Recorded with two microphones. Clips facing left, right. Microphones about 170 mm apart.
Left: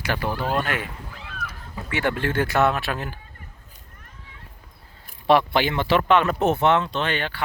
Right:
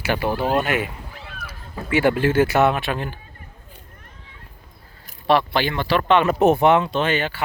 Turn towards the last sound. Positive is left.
turn(degrees=-5)  # may be behind; listen again after turning